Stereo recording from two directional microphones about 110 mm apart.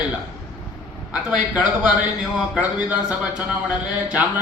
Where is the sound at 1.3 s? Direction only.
10° right (ahead or behind).